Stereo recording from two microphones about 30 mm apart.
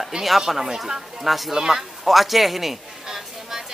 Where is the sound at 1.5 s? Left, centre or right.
Centre.